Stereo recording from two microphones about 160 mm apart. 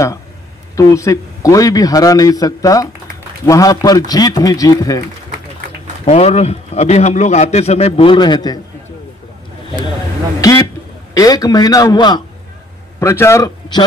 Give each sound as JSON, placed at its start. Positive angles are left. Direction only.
{"t": 0.7, "sound": "a man's voice", "side_deg": 20}
{"t": 6.0, "sound": "a man's voice", "side_deg": 40}
{"t": 10.4, "sound": "a sound", "side_deg": 20}
{"t": 11.1, "sound": "a man's voice", "side_deg": 20}